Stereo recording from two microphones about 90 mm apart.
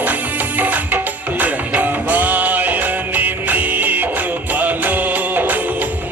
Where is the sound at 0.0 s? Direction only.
20° right (ahead or behind).